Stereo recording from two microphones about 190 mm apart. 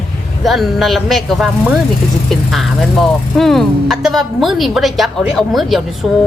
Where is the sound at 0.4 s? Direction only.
Centre (ahead or behind).